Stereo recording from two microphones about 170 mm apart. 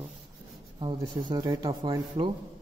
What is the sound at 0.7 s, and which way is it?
Speech, 25° right (ahead or behind).